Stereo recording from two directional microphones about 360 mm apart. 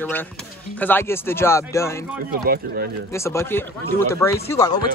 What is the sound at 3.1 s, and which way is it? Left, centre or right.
Speech, centre.